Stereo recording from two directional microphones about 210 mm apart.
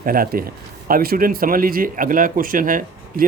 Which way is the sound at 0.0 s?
45° right (ahead or behind).